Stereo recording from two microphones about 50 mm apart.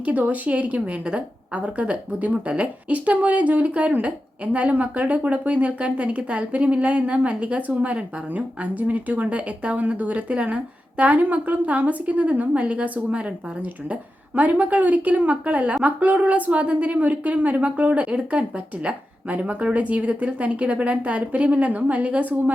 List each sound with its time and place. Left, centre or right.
0.0 s speech: right